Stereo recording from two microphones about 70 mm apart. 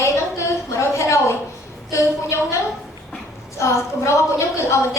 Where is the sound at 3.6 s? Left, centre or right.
Left.